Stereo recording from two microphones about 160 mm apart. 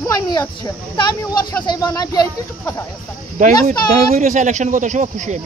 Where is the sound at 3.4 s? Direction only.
50° right (ahead or behind).